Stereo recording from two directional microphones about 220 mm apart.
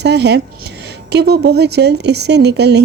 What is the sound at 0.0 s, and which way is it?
Speech, 50° right (ahead or behind).